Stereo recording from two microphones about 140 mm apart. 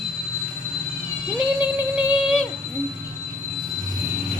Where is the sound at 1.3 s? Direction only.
10° right (ahead or behind).